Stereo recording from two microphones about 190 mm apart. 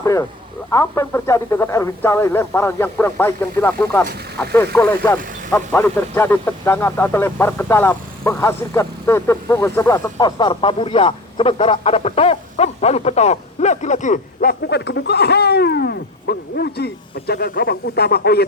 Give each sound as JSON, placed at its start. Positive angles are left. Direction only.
{"t": 0.0, "sound": "speech", "side_deg": 15}
{"t": 14.7, "sound": "speech", "side_deg": 60}